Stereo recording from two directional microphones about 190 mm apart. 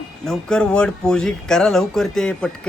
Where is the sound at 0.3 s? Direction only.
5° left (ahead or behind).